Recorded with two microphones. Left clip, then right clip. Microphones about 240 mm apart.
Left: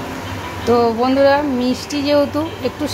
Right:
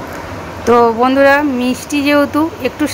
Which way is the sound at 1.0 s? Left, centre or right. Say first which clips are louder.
Right 4 dB; centre.